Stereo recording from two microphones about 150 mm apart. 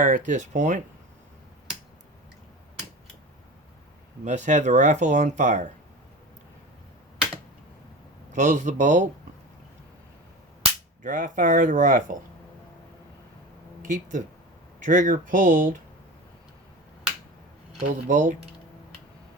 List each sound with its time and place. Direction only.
0.0 s speech: 60° right (ahead or behind)
4.2 s speech: 55° right (ahead or behind)
8.3 s speech: 55° right (ahead or behind)
11.0 s speech: 60° right (ahead or behind)
13.8 s speech: 60° right (ahead or behind)
17.8 s speech: 55° right (ahead or behind)